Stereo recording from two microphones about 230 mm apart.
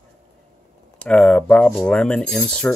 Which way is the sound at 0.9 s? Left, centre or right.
Centre.